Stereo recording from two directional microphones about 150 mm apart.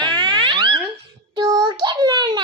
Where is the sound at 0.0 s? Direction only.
30° right (ahead or behind).